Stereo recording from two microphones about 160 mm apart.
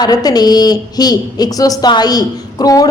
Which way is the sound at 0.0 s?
25° left (ahead or behind).